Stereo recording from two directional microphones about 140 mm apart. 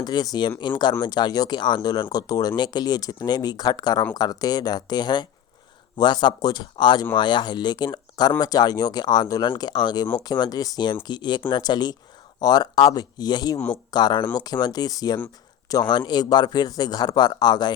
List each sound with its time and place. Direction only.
0.0 s speech: 30° left (ahead or behind)